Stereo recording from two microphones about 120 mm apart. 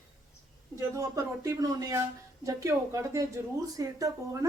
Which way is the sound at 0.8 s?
30° right (ahead or behind).